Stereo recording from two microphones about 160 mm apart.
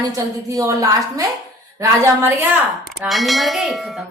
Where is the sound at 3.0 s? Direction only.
Centre (ahead or behind).